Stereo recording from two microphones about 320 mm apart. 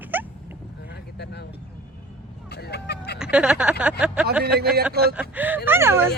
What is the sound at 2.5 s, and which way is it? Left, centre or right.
Vehicle, left.